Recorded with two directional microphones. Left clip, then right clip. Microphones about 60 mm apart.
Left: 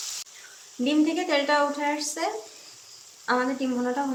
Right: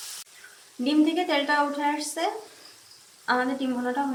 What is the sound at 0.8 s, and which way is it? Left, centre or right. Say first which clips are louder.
A woman's voice: right 1 dB; left.